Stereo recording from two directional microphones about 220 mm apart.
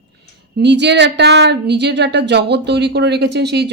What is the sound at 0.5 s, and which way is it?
Speech, 50° right (ahead or behind).